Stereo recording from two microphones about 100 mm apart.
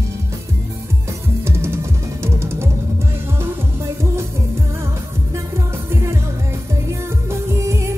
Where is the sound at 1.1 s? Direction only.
25° right (ahead or behind).